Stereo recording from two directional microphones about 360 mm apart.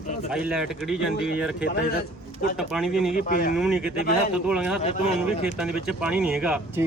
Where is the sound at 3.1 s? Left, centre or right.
Left.